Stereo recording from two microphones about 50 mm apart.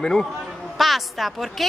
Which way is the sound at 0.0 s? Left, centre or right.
Centre.